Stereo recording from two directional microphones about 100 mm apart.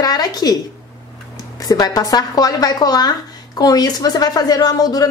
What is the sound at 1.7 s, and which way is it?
Speech, 40° left (ahead or behind).